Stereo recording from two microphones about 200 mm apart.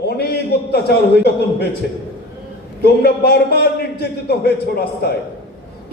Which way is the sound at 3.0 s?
50° left (ahead or behind).